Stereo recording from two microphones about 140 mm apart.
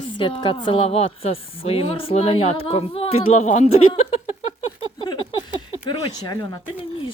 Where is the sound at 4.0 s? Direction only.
45° left (ahead or behind).